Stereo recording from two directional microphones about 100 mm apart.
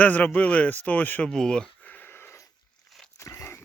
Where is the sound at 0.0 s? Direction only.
15° left (ahead or behind).